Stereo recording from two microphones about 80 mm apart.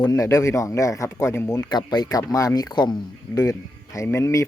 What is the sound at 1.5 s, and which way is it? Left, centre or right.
Speech, left.